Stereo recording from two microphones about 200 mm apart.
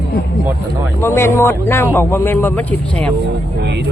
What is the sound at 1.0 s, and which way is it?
A man's voice, 10° left (ahead or behind).